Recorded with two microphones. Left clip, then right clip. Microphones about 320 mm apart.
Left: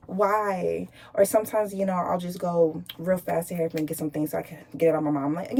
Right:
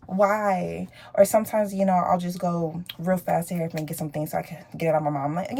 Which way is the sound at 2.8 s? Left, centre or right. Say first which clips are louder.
Right 1 dB; centre.